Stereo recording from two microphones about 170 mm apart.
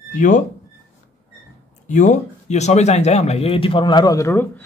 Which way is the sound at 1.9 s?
45° left (ahead or behind).